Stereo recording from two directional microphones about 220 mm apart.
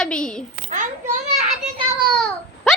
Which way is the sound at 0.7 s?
35° right (ahead or behind).